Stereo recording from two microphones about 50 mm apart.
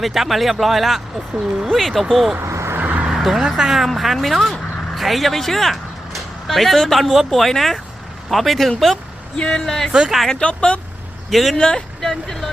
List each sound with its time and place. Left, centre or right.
0.0 s speech: centre
2.4 s vehicle: right
3.1 s a sound: centre
3.5 s speech: centre
4.5 s vehicle: centre
4.9 s speech: centre
9.3 s speech: centre
9.9 s speech: centre
10.4 s speech: left
11.3 s speech: centre
11.6 s speech: centre